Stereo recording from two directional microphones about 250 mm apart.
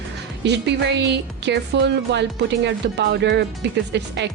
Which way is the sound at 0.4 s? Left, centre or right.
Right.